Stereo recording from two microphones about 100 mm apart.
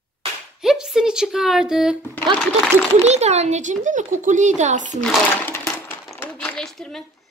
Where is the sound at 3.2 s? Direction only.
90° right.